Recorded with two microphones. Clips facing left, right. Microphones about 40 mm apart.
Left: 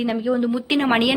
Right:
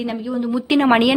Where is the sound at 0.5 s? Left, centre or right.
Centre.